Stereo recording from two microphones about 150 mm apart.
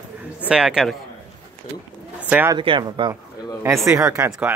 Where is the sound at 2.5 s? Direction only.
30° right (ahead or behind).